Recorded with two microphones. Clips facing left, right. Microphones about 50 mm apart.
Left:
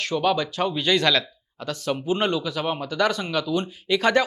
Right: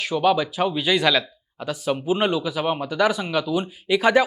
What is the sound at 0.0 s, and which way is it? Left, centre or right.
Speech, centre.